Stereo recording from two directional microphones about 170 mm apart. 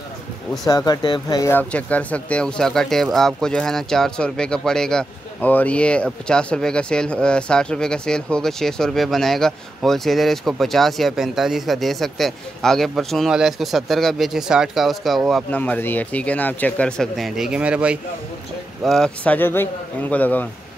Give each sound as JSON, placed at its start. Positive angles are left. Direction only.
{"t": 0.7, "sound": "speech", "side_deg": 25}
{"t": 1.5, "sound": "speech", "side_deg": 10}
{"t": 18.9, "sound": "speech", "side_deg": 5}